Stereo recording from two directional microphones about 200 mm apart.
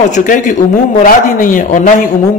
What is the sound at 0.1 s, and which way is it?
A man's voice, 40° left (ahead or behind).